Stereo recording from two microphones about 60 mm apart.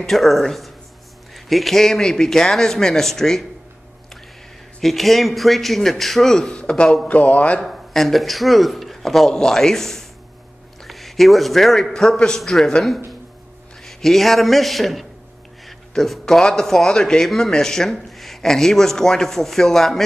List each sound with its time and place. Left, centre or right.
0.0 s speech: centre
4.7 s speech: centre
6.5 s a man's voice: centre
7.1 s a man's voice: left
7.6 s a man's voice: centre
13.8 s speech: centre